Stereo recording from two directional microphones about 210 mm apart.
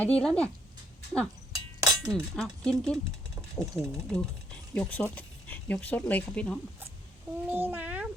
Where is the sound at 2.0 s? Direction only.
Centre (ahead or behind).